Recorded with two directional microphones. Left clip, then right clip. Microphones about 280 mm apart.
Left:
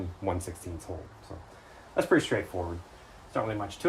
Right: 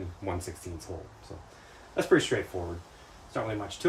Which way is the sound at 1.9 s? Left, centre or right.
Centre.